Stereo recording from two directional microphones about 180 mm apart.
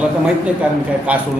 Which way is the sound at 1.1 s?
10° right (ahead or behind).